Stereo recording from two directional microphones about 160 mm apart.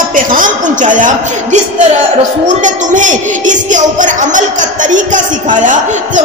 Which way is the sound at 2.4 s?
50° right (ahead or behind).